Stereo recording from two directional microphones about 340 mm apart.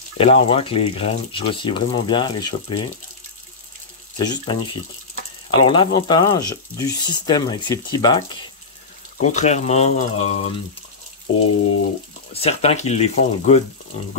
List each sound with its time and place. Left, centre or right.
0.2 s speech: centre
4.2 s speech: centre
12.3 s speech: centre